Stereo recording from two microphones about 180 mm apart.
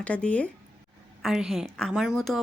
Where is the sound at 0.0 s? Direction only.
5° left (ahead or behind).